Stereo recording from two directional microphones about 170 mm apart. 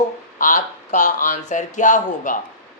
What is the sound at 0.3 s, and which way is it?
Speech, 50° left (ahead or behind).